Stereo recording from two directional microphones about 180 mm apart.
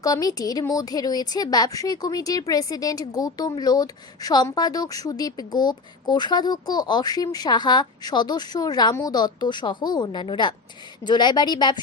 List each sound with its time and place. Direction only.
0.0 s a woman's voice: 20° left (ahead or behind)